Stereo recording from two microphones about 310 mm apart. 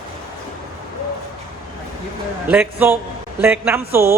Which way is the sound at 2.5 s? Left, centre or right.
Centre.